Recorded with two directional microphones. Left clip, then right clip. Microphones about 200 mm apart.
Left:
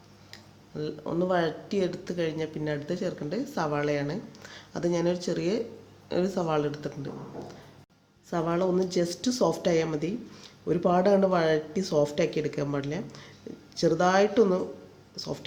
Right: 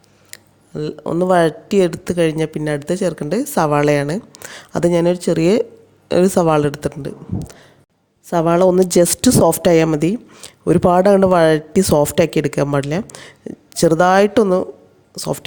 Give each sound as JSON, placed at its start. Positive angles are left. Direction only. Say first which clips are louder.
{"t": 0.3, "sound": "speech", "louder": "right 9 dB", "side_deg": -50}